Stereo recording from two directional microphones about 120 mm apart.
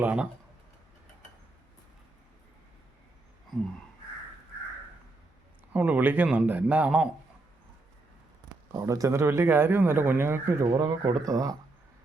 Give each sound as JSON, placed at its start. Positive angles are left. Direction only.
{"t": 0.0, "sound": "a man's voice", "side_deg": -10}
{"t": 5.7, "sound": "a man's voice", "side_deg": -15}
{"t": 8.7, "sound": "speech", "side_deg": -30}